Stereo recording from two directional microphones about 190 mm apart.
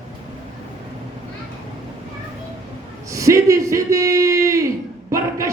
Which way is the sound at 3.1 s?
15° right (ahead or behind).